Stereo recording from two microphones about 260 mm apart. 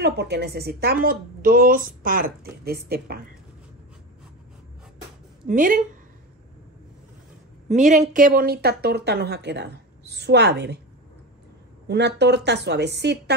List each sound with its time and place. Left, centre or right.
0.0 s a woman's voice: right
5.5 s a woman's voice: right
7.6 s a woman's voice: right
12.2 s a woman's voice: right